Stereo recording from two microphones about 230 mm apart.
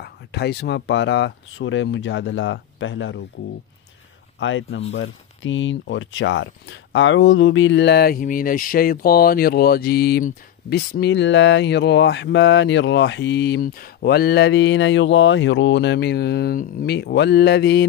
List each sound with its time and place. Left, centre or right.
0.0 s speech: left
4.4 s speech: left